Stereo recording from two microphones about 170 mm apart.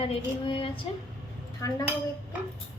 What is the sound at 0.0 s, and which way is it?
Speech, 30° left (ahead or behind).